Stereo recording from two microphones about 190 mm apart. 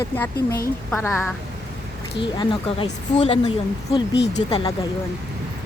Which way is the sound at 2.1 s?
25° left (ahead or behind).